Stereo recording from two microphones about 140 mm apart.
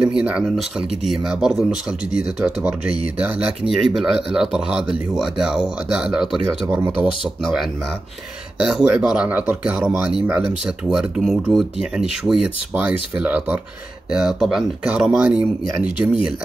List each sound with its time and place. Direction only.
0.0 s speech: 10° right (ahead or behind)
8.6 s speech: 5° right (ahead or behind)